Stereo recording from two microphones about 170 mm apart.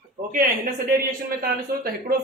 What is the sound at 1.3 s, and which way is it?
Speech, 60° right (ahead or behind).